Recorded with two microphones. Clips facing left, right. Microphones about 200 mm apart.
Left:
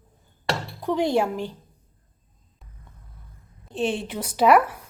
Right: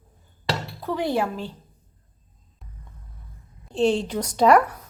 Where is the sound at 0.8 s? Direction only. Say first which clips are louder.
Left 3 dB; 15° left (ahead or behind).